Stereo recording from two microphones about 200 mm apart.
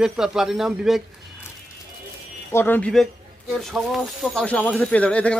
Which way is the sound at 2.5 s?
10° left (ahead or behind).